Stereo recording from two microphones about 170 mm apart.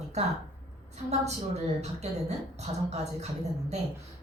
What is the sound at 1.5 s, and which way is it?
A woman's voice, 40° right (ahead or behind).